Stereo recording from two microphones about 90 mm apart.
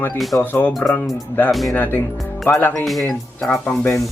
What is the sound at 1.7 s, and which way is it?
Speech, 20° left (ahead or behind).